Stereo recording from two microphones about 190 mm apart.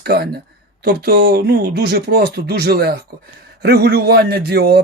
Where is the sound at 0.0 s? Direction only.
55° right (ahead or behind).